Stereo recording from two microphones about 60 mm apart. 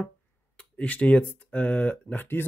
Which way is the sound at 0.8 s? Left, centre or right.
Left.